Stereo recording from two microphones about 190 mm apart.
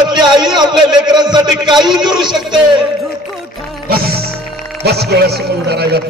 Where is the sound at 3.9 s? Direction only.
55° right (ahead or behind).